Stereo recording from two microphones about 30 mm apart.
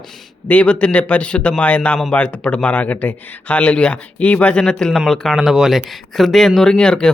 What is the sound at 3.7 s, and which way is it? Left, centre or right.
Speech, left.